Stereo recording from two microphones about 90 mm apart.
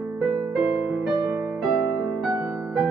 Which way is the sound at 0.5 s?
10° right (ahead or behind).